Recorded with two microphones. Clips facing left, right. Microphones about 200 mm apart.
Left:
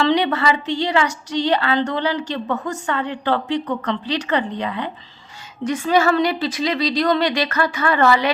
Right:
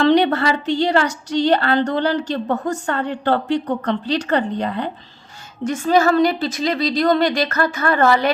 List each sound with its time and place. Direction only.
0.1 s a woman's voice: 55° right (ahead or behind)